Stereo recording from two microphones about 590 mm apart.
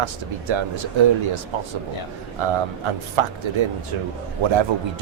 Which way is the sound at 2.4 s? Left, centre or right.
Right.